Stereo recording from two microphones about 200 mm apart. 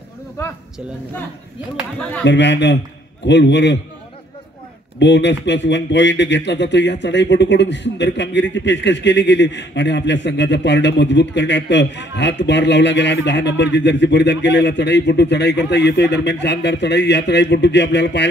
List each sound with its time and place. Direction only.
2.2 s speech: 60° left (ahead or behind)
4.9 s speech: 60° left (ahead or behind)